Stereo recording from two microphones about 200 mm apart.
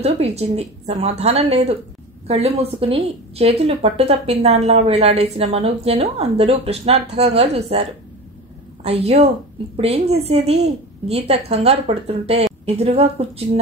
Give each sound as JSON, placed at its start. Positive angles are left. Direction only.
{"t": 0.0, "sound": "a woman's voice", "side_deg": -30}
{"t": 8.8, "sound": "a woman's voice", "side_deg": -30}